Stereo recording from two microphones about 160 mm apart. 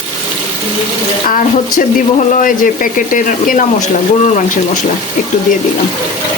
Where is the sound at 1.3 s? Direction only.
55° left (ahead or behind).